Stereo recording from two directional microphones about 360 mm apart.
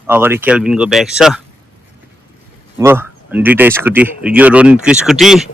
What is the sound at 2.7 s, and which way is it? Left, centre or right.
Speech, centre.